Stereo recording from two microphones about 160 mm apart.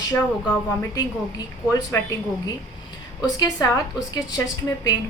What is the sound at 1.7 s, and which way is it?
Speech, 20° left (ahead or behind).